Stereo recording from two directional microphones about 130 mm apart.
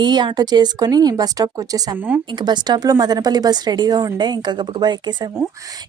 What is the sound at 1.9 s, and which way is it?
Speech, 15° right (ahead or behind).